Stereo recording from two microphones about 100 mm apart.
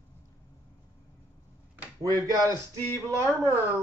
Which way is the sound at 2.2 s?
35° right (ahead or behind).